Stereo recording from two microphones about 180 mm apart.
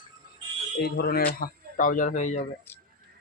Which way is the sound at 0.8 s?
60° left (ahead or behind).